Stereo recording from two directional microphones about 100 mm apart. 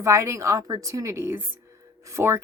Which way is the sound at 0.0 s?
30° right (ahead or behind).